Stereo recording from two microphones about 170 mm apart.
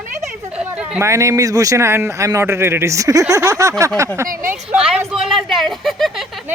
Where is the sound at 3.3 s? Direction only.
20° right (ahead or behind).